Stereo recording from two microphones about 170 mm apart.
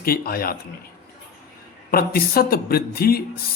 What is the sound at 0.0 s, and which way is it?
Speech, 60° left (ahead or behind).